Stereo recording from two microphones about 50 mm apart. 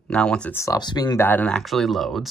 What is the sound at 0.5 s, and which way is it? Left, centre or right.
Speech, left.